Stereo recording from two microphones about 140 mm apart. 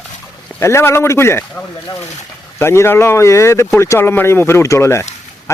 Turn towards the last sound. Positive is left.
turn(degrees=20)  # may be behind; listen again after turning